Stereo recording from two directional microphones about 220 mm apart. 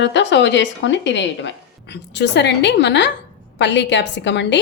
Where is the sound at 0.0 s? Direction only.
55° left (ahead or behind).